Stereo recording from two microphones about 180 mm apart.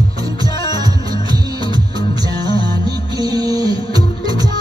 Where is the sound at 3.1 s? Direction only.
20° right (ahead or behind).